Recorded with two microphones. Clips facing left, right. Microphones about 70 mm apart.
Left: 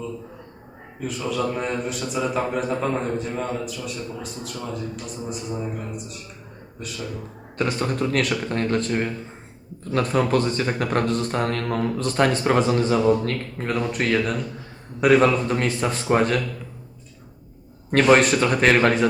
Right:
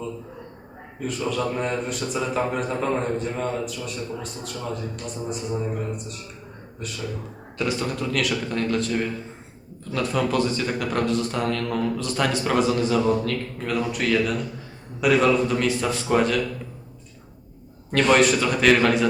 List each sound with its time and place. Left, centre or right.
0.9 s a man's voice: centre
7.6 s speech: left
9.9 s speech: left
17.9 s speech: left